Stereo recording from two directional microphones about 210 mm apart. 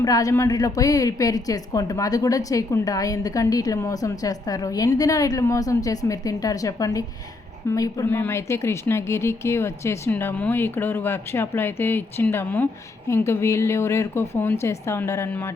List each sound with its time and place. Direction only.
0.0 s a woman's voice: 15° left (ahead or behind)